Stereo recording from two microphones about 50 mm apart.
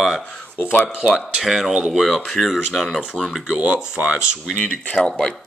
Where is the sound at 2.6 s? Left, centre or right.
Centre.